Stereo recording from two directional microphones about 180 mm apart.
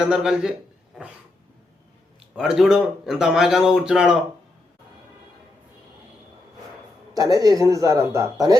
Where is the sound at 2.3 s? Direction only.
Centre (ahead or behind).